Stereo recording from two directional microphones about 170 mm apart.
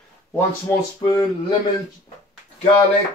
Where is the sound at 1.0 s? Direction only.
25° left (ahead or behind).